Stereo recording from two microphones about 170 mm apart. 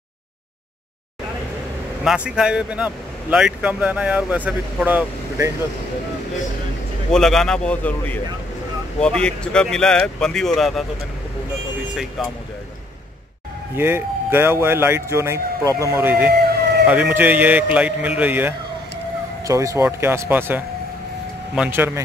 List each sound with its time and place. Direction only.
2.0 s speech: 5° right (ahead or behind)
7.1 s speech: 5° left (ahead or behind)
11.9 s speech: centre (ahead or behind)
13.7 s speech: 15° right (ahead or behind)
16.3 s a sound: 70° right (ahead or behind)
16.8 s speech: 10° right (ahead or behind)